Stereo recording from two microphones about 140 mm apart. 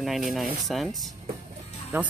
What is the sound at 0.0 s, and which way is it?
Speech, centre (ahead or behind).